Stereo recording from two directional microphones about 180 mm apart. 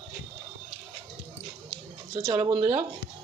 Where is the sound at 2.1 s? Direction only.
25° right (ahead or behind).